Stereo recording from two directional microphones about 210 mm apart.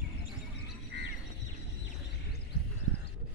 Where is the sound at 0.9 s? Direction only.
55° right (ahead or behind).